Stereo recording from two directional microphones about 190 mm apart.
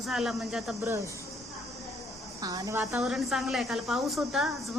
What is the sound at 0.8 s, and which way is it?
Speech, 15° right (ahead or behind).